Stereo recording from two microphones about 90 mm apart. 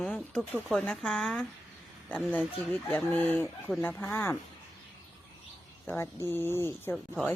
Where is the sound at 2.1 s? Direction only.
15° left (ahead or behind).